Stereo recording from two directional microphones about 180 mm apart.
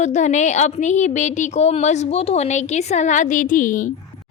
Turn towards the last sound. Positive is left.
turn(degrees=45)  # may be behind; listen again after turning